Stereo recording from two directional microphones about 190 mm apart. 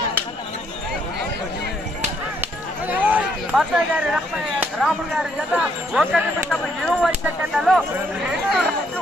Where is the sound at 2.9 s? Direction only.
10° right (ahead or behind).